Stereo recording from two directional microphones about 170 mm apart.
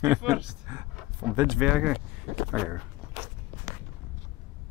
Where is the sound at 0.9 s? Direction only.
5° right (ahead or behind).